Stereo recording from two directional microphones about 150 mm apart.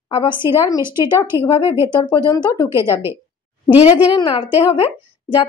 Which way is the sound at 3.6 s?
35° left (ahead or behind).